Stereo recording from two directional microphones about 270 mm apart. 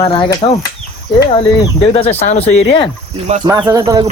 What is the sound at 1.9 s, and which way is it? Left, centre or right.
Speech, left.